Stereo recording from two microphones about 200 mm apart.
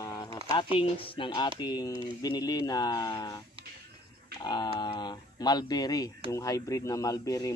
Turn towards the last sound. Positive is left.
turn(degrees=15)  # may be behind; listen again after turning